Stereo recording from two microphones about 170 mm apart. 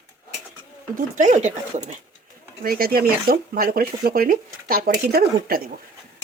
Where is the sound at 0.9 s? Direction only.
50° right (ahead or behind).